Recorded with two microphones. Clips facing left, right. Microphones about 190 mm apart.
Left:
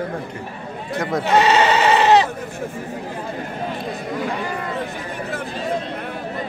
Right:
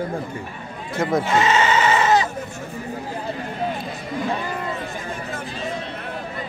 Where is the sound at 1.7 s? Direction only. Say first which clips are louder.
Left 2 dB; 35° left (ahead or behind).